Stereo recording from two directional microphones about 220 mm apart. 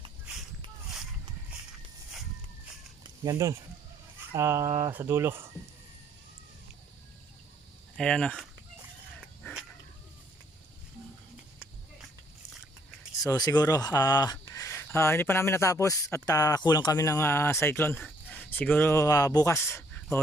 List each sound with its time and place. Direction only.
3.0 s a sound: 15° right (ahead or behind)
4.3 s speech: 10° right (ahead or behind)
7.9 s speech: 5° left (ahead or behind)
13.2 s speech: 15° left (ahead or behind)